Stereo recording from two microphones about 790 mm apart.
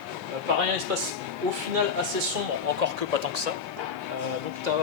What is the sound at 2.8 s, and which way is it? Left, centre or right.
Speech, right.